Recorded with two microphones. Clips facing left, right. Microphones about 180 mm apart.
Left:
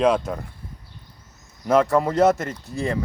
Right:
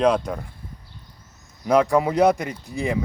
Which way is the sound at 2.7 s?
15° right (ahead or behind).